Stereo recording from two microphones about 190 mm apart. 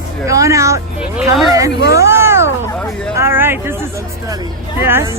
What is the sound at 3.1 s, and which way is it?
Speech, 10° right (ahead or behind).